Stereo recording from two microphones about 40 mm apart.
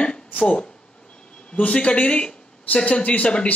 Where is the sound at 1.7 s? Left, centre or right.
Left.